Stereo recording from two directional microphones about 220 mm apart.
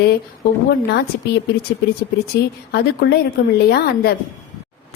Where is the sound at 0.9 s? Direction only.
50° left (ahead or behind).